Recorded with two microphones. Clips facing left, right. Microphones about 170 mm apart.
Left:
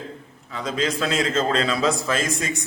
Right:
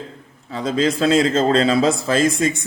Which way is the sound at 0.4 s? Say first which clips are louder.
Right 6 dB; 35° right (ahead or behind).